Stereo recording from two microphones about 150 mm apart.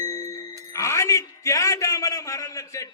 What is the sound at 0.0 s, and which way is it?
Music, 20° left (ahead or behind).